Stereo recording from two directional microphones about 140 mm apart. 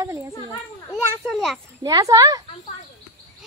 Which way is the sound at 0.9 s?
Centre (ahead or behind).